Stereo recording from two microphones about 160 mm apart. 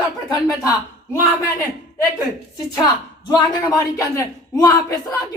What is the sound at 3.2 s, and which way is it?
Speech, 25° left (ahead or behind).